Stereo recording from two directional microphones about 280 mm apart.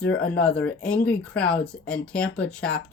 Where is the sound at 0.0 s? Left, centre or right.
Centre.